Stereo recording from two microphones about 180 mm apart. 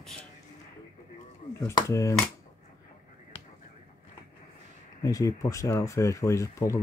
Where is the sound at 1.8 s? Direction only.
15° left (ahead or behind).